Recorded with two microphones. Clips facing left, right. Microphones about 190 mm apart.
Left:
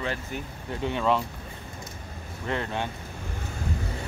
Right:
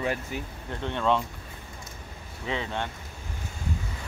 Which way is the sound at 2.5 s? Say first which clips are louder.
Left 1 dB; 5° left (ahead or behind).